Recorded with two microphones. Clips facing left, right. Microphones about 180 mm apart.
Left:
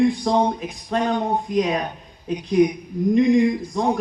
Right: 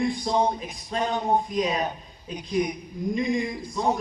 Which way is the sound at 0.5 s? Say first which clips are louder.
Left 5 dB; 65° left (ahead or behind).